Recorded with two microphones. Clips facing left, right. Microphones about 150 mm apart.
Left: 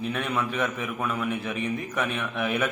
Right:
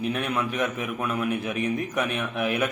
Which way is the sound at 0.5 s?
10° right (ahead or behind).